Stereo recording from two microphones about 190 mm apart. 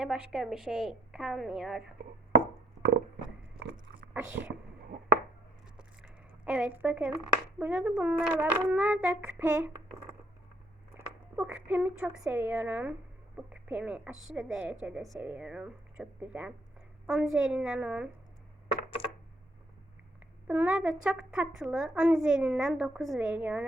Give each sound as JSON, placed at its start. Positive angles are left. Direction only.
{"t": 0.0, "sound": "speech", "side_deg": -5}
{"t": 3.6, "sound": "biting", "side_deg": -65}
{"t": 4.1, "sound": "speech", "side_deg": -10}
{"t": 5.7, "sound": "a sound", "side_deg": -5}
{"t": 7.6, "sound": "a child's voice", "side_deg": -5}
{"t": 20.5, "sound": "speech", "side_deg": -5}